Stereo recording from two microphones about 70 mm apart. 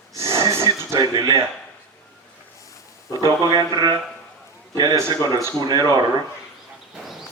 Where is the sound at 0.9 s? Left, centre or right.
Right.